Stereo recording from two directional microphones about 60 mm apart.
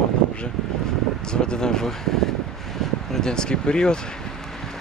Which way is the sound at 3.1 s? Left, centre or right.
Centre.